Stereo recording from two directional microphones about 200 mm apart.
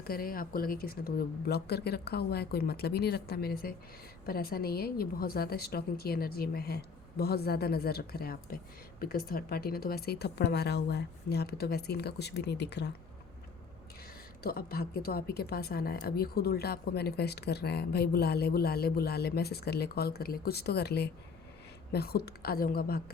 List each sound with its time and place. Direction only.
0.0 s speech: 45° left (ahead or behind)
14.4 s speech: 50° left (ahead or behind)